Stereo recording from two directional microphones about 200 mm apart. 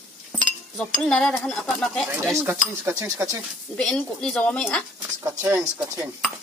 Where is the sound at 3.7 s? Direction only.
5° left (ahead or behind).